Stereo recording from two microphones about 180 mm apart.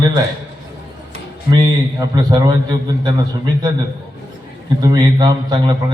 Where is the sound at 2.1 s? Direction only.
25° right (ahead or behind).